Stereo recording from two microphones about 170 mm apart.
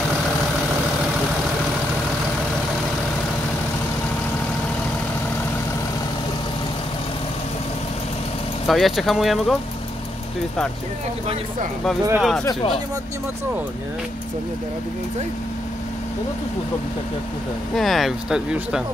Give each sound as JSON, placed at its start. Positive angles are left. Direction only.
{"t": 8.6, "sound": "speech", "side_deg": 0}
{"t": 12.2, "sound": "speech", "side_deg": 0}
{"t": 12.4, "sound": "speech", "side_deg": 30}
{"t": 17.7, "sound": "speech", "side_deg": 0}